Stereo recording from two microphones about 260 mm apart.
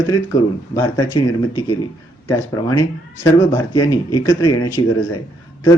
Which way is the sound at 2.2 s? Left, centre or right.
Centre.